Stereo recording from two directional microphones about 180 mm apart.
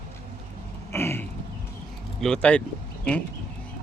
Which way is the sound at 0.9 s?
15° left (ahead or behind).